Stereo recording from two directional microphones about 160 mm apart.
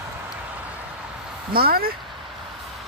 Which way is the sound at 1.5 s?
70° right (ahead or behind).